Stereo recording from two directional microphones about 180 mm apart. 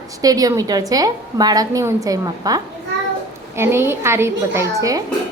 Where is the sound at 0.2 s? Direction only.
20° right (ahead or behind).